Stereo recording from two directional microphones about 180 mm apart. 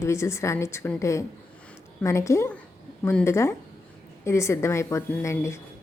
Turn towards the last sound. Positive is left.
turn(degrees=15)  # may be behind; listen again after turning